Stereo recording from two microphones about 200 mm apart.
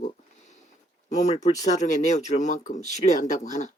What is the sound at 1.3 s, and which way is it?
Speech, 35° left (ahead or behind).